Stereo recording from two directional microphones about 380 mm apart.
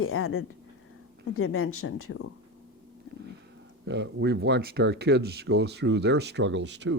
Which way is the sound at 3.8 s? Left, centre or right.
Right.